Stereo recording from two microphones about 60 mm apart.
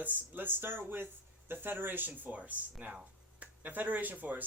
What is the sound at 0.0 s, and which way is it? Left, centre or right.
Speech, right.